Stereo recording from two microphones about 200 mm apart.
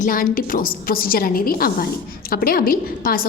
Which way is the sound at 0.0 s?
45° left (ahead or behind).